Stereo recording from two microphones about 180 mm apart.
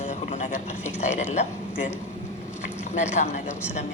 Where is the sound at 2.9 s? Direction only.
45° left (ahead or behind).